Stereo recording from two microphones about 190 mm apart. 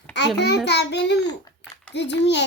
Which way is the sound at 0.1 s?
65° left (ahead or behind).